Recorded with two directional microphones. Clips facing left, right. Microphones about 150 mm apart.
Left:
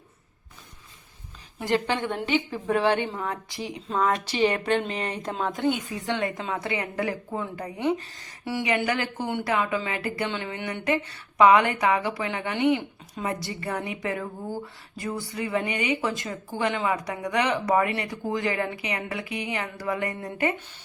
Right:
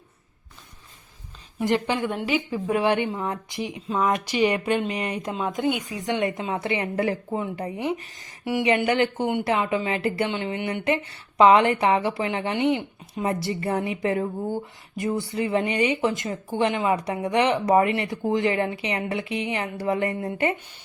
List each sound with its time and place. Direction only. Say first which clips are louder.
1.6 s a woman's voice: right 2 dB; 15° right (ahead or behind)
2.1 s a woman's voice: right 1 dB; 5° right (ahead or behind); by 20.6 s 25° right (ahead or behind)